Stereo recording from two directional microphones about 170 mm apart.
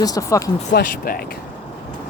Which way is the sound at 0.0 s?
20° left (ahead or behind).